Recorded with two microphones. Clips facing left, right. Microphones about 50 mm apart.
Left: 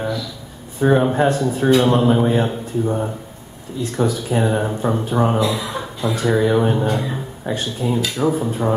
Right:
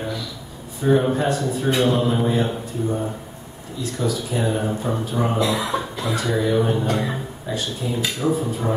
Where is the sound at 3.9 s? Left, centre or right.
Left.